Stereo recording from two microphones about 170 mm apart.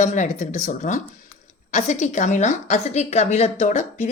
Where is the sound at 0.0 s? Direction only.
45° left (ahead or behind).